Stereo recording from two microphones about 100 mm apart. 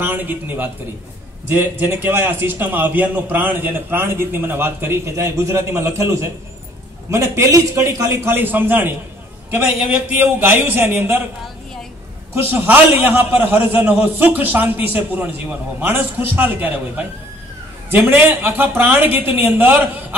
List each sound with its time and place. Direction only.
0.0 s a man's voice: 20° right (ahead or behind)
12.4 s a man's voice: 20° right (ahead or behind)